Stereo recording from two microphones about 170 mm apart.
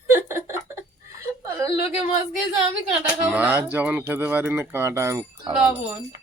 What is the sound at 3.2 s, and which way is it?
Speech, 10° right (ahead or behind).